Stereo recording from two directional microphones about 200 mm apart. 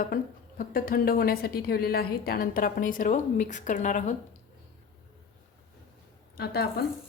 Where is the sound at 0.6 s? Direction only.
45° left (ahead or behind).